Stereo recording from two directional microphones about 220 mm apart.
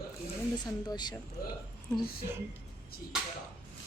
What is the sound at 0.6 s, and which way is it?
Speech, 20° left (ahead or behind).